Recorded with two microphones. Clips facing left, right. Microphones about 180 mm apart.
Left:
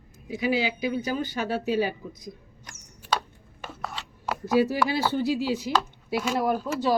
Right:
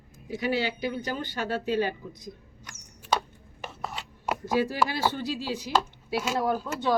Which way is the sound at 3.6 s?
20° right (ahead or behind).